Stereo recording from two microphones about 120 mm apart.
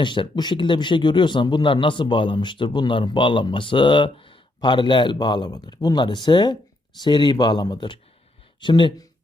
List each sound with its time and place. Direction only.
0.0 s speech: 40° left (ahead or behind)